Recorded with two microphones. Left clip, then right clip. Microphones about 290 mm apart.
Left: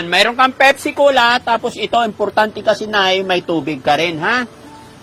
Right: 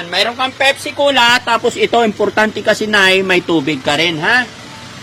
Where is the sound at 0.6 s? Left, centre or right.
Left.